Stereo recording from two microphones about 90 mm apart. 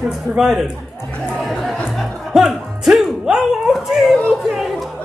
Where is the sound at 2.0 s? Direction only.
5° right (ahead or behind).